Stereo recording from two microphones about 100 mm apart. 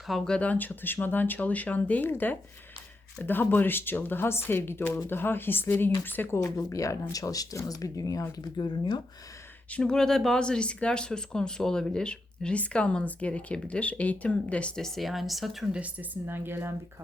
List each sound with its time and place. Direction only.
0.1 s speech: 10° left (ahead or behind); by 8.6 s 35° left (ahead or behind)
8.6 s speech: 50° left (ahead or behind)
9.7 s speech: 5° left (ahead or behind)
15.8 s speech: 20° right (ahead or behind)